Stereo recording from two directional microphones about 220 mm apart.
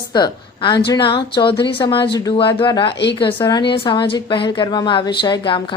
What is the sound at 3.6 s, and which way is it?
A woman's voice, 25° left (ahead or behind).